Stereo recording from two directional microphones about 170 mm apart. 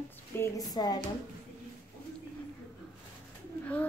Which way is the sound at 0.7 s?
25° left (ahead or behind).